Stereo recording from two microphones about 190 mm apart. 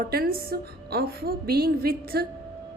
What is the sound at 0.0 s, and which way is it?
A woman's voice, 55° right (ahead or behind).